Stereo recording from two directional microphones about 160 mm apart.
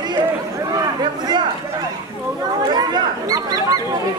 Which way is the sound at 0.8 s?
30° right (ahead or behind).